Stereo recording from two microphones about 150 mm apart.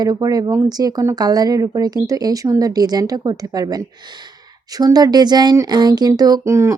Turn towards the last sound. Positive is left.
turn(degrees=-20)  # may be behind; listen again after turning